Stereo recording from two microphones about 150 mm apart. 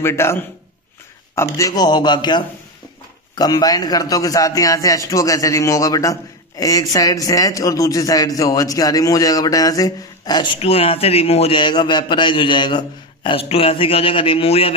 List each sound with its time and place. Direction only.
0.0 s a man's voice: 15° left (ahead or behind); by 14.8 s 40° left (ahead or behind)